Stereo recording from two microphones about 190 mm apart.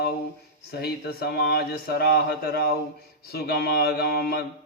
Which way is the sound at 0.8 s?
55° left (ahead or behind).